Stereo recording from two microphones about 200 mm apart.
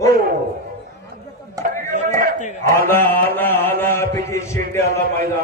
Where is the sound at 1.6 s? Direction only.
45° right (ahead or behind).